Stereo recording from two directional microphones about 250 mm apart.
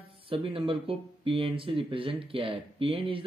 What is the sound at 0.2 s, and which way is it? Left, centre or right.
Speech, right.